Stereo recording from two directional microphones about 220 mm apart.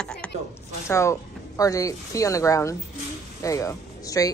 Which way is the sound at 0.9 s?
15° left (ahead or behind).